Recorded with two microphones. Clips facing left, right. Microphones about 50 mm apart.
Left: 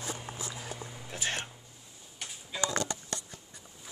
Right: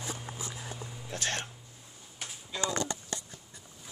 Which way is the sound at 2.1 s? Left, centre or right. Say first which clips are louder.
Even; centre.